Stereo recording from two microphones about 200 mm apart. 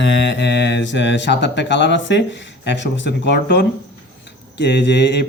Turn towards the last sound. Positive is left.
turn(degrees=60)  # may be behind; listen again after turning